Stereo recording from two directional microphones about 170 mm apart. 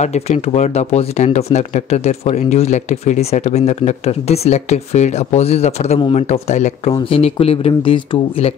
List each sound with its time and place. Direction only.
0.0 s speech: 40° left (ahead or behind)